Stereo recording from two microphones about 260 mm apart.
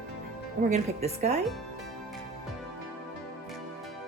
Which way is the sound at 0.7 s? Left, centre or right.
Right.